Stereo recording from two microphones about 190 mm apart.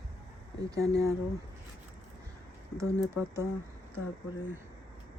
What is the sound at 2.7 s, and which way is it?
Speech, 15° right (ahead or behind).